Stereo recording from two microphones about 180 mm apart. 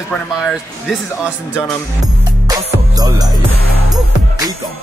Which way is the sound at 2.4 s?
20° right (ahead or behind).